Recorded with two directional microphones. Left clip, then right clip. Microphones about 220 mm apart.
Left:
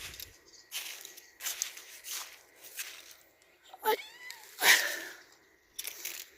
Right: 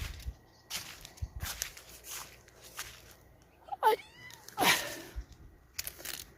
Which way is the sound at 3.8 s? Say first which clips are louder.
Right 3 dB; centre (ahead or behind).